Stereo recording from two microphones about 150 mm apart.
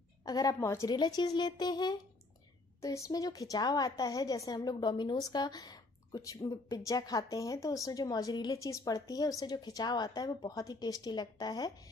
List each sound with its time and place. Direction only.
0.2 s a woman's voice: 25° left (ahead or behind)
0.9 s a woman's voice: 30° left (ahead or behind)